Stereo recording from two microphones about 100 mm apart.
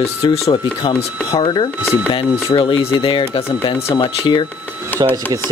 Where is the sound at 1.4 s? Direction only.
55° left (ahead or behind).